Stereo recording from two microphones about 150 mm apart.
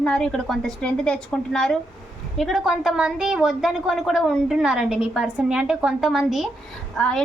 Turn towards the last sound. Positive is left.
turn(degrees=5)  # may be behind; listen again after turning